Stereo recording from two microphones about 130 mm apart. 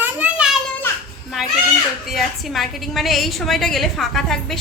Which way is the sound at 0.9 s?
15° left (ahead or behind).